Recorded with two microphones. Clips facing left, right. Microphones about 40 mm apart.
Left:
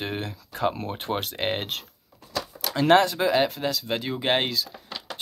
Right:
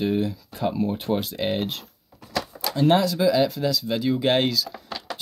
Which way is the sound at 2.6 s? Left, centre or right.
Left.